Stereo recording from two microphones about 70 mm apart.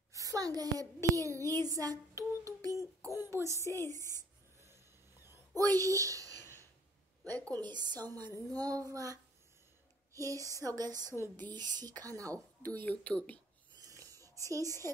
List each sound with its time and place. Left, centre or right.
0.1 s a child's voice: right
1.7 s a sound: right
3.6 s a woman's voice: left
5.6 s a child's voice: right
7.5 s a woman's voice: right
8.5 s a child's voice: right
10.1 s a sound: right
11.5 s speech: right
12.0 s a child's voice: right
12.6 s a woman's voice: left
14.2 s a sound: right
14.6 s a woman's voice: left